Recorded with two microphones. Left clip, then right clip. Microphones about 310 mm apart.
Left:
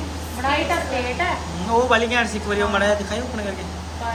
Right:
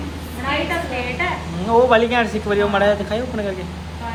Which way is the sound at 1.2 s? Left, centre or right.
Left.